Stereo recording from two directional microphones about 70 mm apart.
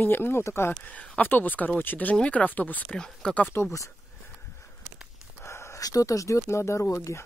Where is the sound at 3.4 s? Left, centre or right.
Left.